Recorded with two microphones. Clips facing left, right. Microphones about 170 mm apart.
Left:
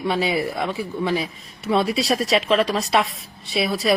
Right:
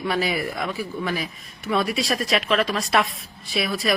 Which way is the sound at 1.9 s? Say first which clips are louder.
Left 3 dB; centre (ahead or behind).